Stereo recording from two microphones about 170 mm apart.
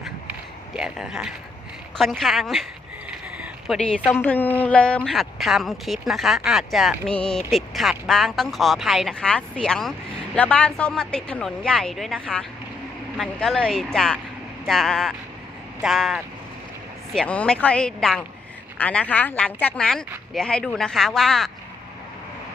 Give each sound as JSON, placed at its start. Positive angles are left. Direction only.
{"t": 0.8, "sound": "a woman's voice", "side_deg": -5}
{"t": 3.7, "sound": "a woman's voice", "side_deg": 0}